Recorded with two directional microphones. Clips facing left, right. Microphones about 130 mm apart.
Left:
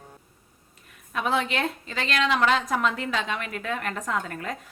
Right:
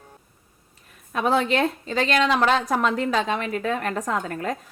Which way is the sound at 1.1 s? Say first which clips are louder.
Right 5 dB; 35° right (ahead or behind).